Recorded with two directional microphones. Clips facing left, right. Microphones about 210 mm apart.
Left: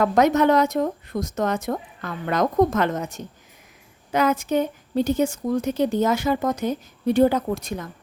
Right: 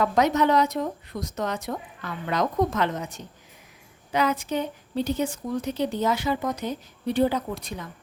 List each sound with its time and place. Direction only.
0.0 s a woman's voice: 50° left (ahead or behind)